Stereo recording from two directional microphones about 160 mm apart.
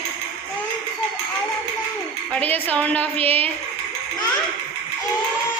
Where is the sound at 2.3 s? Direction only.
10° left (ahead or behind).